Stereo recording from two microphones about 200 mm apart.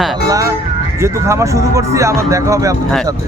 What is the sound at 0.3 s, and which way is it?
Vehicle, 15° right (ahead or behind).